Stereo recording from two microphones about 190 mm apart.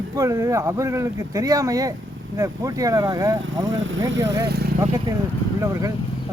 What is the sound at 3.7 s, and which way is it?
Speech, 85° right.